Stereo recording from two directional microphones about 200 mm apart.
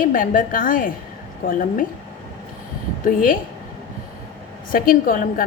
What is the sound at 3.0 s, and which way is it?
Speech, 45° left (ahead or behind).